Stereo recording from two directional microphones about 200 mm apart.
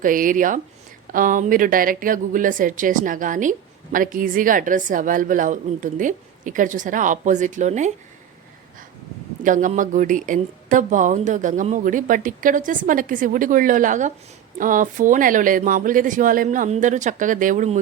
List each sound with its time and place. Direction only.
0.0 s speech: 45° right (ahead or behind)
9.4 s speech: 40° right (ahead or behind)